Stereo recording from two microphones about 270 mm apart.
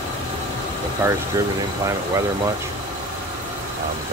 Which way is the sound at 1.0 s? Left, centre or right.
Centre.